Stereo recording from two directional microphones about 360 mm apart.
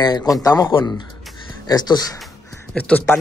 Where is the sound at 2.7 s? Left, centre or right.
Centre.